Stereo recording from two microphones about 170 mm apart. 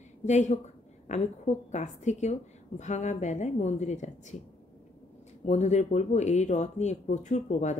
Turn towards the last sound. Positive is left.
turn(degrees=45)  # may be behind; listen again after turning